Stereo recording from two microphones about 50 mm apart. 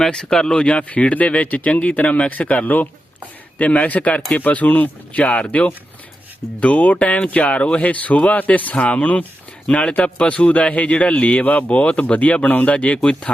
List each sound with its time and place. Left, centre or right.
0.0 s speech: centre